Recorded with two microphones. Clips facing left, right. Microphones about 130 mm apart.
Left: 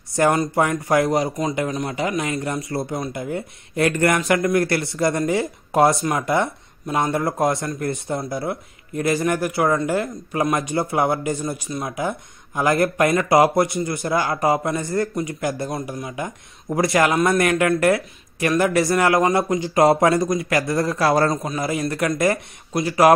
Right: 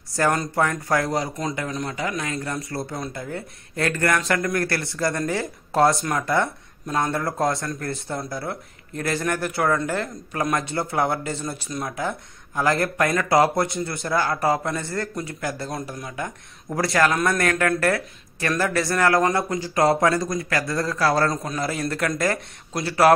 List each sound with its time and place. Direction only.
0.1 s speech: 20° left (ahead or behind)
10.5 s speech: 20° left (ahead or behind)
13.3 s speech: 5° left (ahead or behind)
14.0 s speech: 15° left (ahead or behind)
15.8 s speech: 10° left (ahead or behind)
21.3 s speech: centre (ahead or behind)